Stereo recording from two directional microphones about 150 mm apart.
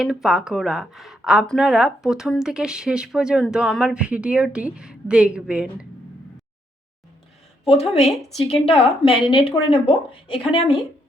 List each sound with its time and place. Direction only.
0.0 s a woman's voice: 5° right (ahead or behind)
7.6 s speech: 45° left (ahead or behind)
8.0 s a woman's voice: centre (ahead or behind)
8.4 s speech: 40° left (ahead or behind)